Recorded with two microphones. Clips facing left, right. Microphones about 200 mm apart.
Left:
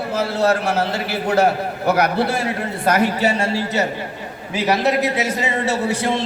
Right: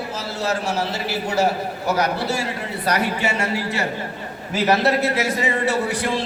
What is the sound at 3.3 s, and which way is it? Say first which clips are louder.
Speech: left 3 dB; 30° left (ahead or behind).